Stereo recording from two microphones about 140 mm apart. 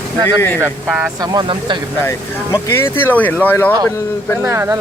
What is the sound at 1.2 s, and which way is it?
Speech, 30° right (ahead or behind).